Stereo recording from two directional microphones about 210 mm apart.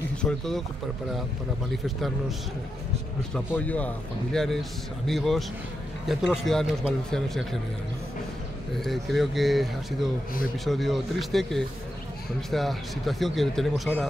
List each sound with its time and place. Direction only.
0.2 s a man's voice: centre (ahead or behind)
1.7 s a man's voice: centre (ahead or behind)
3.3 s a man's voice: 5° left (ahead or behind)
8.7 s a man's voice: centre (ahead or behind)